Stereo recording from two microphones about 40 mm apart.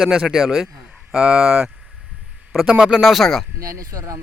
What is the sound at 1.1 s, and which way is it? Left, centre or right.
Speech, centre.